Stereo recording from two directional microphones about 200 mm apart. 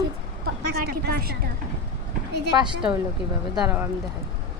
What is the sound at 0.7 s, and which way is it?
Speech, 50° right (ahead or behind).